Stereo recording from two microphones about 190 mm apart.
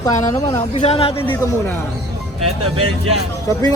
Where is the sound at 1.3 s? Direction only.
15° left (ahead or behind).